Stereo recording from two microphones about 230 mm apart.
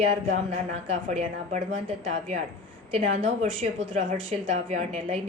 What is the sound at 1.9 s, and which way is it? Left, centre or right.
A woman's voice, right.